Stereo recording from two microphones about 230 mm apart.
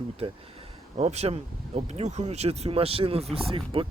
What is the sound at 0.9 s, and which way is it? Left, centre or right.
Speech, right.